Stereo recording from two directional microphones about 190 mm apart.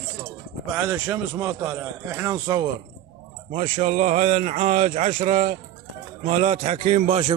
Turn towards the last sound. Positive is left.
turn(degrees=-35)  # may be behind; listen again after turning